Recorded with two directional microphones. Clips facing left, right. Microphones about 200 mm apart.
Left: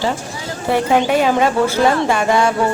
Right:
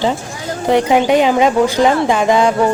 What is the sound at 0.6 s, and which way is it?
A woman's voice, 15° right (ahead or behind).